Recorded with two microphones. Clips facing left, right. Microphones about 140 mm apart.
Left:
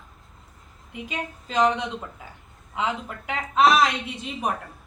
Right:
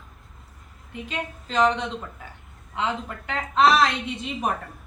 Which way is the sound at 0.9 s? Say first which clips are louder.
Right 1 dB; 10° left (ahead or behind).